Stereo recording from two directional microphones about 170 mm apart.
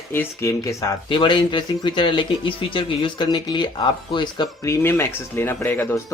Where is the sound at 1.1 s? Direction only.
30° left (ahead or behind).